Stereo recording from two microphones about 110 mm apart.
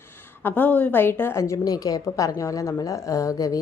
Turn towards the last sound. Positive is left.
turn(degrees=30)  # may be behind; listen again after turning